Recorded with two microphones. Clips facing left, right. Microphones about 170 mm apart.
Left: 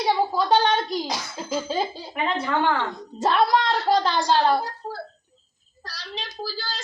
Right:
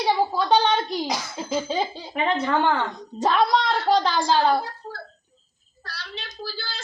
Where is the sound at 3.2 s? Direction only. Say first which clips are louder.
Even; 5° left (ahead or behind).